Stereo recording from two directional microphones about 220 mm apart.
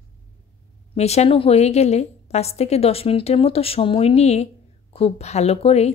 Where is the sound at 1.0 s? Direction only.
30° left (ahead or behind).